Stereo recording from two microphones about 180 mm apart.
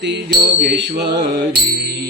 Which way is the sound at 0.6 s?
75° right (ahead or behind).